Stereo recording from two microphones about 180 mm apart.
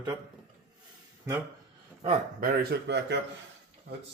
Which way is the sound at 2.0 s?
45° right (ahead or behind).